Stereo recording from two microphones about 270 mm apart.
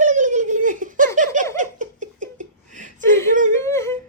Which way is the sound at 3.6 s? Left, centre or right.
Centre.